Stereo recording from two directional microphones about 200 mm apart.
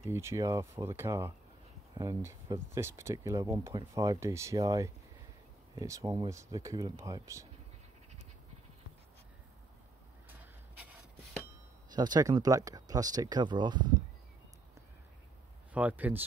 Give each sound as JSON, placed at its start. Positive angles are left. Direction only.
{"t": 0.1, "sound": "speech", "side_deg": -15}
{"t": 11.9, "sound": "speech", "side_deg": -20}
{"t": 15.7, "sound": "speech", "side_deg": -5}